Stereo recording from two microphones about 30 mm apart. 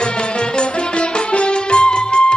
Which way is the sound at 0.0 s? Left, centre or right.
Left.